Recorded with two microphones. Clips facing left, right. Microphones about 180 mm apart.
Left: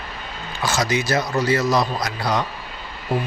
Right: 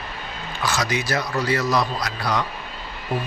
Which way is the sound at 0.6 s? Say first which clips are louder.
Left 3 dB; 25° left (ahead or behind).